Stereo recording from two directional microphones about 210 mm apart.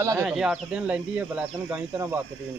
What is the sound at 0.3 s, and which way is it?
A man's voice, 5° right (ahead or behind).